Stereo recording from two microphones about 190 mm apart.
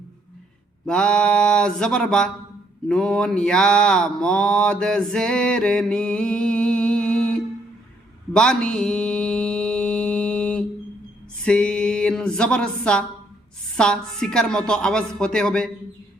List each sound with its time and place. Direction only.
0.9 s mantra: 5° left (ahead or behind)
11.4 s speech: 5° left (ahead or behind)
13.7 s mantra: 5° left (ahead or behind)